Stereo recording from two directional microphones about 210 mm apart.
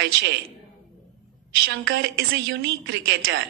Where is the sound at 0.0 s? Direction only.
55° right (ahead or behind).